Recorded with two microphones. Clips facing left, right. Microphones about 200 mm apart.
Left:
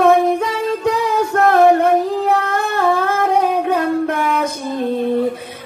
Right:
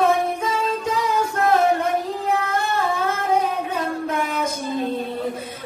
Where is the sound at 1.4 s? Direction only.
60° left (ahead or behind).